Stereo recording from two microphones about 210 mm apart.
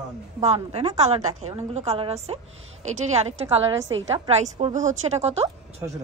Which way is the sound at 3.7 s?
65° right (ahead or behind).